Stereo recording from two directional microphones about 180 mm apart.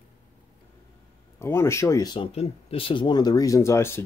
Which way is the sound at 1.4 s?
15° left (ahead or behind).